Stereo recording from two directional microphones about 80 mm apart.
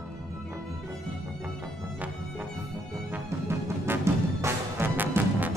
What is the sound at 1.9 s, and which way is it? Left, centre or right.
Music, centre.